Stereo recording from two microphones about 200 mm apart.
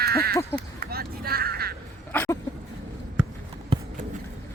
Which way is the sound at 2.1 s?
10° left (ahead or behind).